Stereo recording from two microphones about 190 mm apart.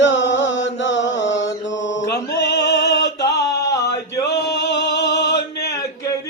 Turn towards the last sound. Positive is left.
turn(degrees=65)  # may be behind; listen again after turning